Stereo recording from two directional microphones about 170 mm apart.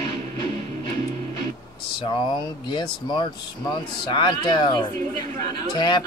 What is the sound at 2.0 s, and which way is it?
Speech, 25° left (ahead or behind).